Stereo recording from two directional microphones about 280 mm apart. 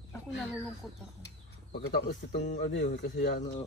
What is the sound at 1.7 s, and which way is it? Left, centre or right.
Speech, left.